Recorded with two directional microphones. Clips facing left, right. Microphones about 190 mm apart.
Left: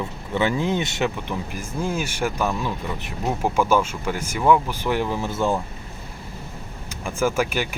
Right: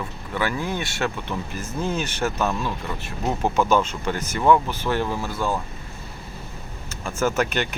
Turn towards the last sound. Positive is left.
turn(degrees=10)  # may be behind; listen again after turning